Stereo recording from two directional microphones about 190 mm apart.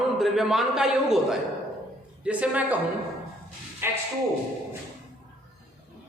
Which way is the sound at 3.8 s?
10° right (ahead or behind).